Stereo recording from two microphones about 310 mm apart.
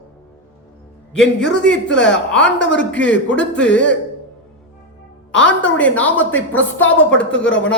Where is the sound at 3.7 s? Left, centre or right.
Left.